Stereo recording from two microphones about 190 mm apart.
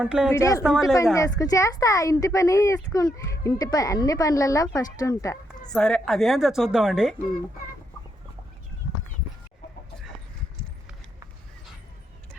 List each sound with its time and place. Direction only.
0.0 s a woman's voice: 5° right (ahead or behind)
0.3 s speech: 15° left (ahead or behind)
0.6 s a woman's voice: centre (ahead or behind)
1.1 s speech: 15° left (ahead or behind)
5.7 s a woman's voice: 5° left (ahead or behind)